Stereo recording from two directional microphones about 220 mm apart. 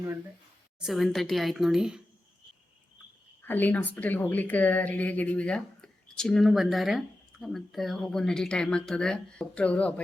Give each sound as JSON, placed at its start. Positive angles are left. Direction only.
{"t": 0.8, "sound": "a woman's voice", "side_deg": 0}
{"t": 3.4, "sound": "a woman's voice", "side_deg": 10}